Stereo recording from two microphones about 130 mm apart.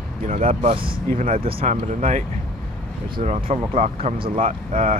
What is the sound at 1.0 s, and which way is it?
Speech, 90° right.